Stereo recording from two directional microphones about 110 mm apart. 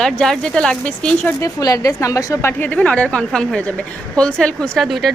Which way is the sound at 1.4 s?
30° left (ahead or behind).